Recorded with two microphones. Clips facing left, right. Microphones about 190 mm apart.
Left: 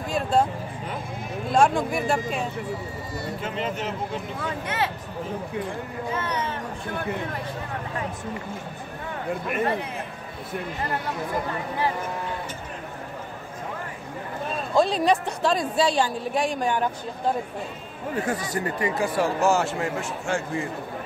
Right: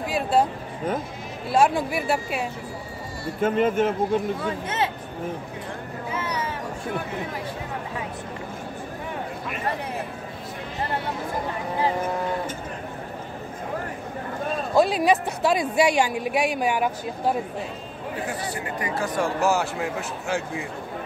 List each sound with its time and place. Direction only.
0.1 s a sound: 10° right (ahead or behind)
1.5 s speech: 5° right (ahead or behind)
3.3 s a man's voice: 50° right (ahead or behind)
4.6 s speech: 25° right (ahead or behind)
6.1 s speech: 10° right (ahead or behind)
14.8 s speech: 5° right (ahead or behind)
18.1 s speech: 45° left (ahead or behind)
18.8 s speech: 25° left (ahead or behind)
19.1 s speech: centre (ahead or behind)